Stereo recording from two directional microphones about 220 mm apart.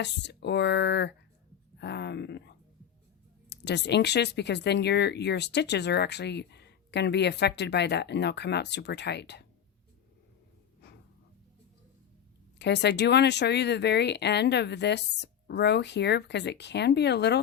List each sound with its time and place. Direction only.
0.0 s speech: 50° left (ahead or behind)
3.5 s speech: 50° left (ahead or behind)
10.8 s a sound: 50° left (ahead or behind)
12.5 s speech: 50° left (ahead or behind)